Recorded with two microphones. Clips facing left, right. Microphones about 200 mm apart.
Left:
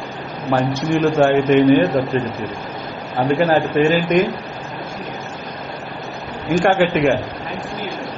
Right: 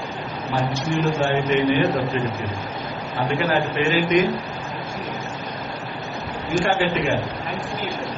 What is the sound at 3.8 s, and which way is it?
Speech, 45° left (ahead or behind).